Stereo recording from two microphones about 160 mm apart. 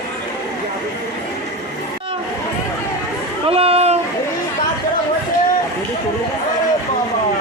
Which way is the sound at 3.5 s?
40° right (ahead or behind).